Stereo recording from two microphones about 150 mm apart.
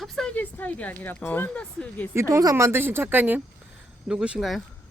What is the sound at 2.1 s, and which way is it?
A woman's voice, 20° right (ahead or behind).